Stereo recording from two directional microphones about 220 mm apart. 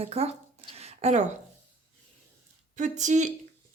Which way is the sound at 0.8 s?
30° right (ahead or behind).